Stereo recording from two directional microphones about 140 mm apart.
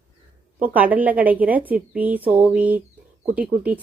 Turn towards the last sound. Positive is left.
turn(degrees=-10)  # may be behind; listen again after turning